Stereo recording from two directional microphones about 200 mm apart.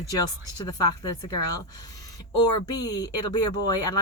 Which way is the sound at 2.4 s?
20° left (ahead or behind).